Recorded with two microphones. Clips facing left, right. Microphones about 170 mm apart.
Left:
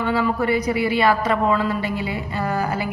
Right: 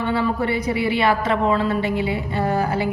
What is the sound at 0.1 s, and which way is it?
A woman's voice, 25° right (ahead or behind).